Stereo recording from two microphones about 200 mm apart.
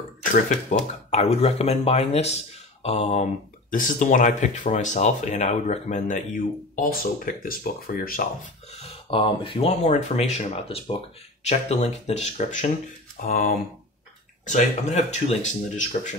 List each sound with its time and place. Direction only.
0.3 s speech: 35° left (ahead or behind)
8.8 s speech: 25° left (ahead or behind)